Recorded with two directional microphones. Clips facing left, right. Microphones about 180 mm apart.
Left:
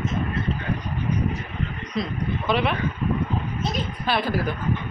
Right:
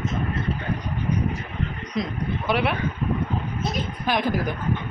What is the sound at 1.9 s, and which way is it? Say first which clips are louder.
Speech: even; 15° right (ahead or behind).